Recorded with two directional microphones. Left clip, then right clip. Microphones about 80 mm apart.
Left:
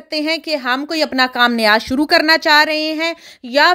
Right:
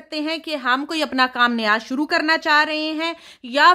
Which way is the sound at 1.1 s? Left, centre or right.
Left.